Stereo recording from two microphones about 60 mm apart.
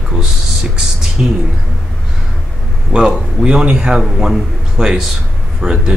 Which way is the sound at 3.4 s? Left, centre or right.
Centre.